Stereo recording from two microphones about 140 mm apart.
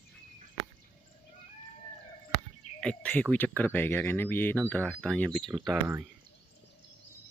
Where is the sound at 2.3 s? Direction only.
5° left (ahead or behind).